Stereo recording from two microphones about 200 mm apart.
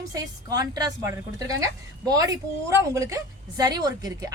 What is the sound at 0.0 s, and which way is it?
A woman's voice, 20° right (ahead or behind).